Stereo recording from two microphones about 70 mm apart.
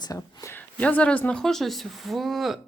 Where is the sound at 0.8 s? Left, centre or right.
Centre.